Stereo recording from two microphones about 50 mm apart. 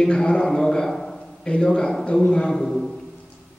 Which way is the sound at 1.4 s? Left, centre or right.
Centre.